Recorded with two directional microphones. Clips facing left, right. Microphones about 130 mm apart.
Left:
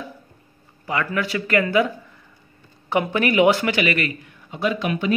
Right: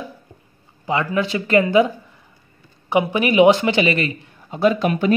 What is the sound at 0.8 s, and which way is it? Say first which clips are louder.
Speech: right 4 dB; 25° right (ahead or behind).